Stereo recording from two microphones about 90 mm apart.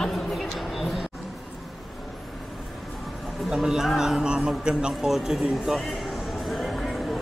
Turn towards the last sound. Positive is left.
turn(degrees=0)  # may be behind; listen again after turning